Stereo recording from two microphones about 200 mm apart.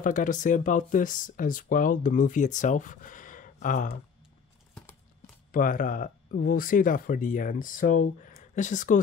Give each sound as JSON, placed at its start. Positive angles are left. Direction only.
{"t": 0.0, "sound": "speech", "side_deg": 40}
{"t": 5.5, "sound": "speech", "side_deg": 45}